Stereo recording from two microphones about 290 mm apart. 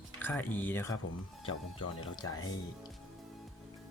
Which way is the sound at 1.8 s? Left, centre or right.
Left.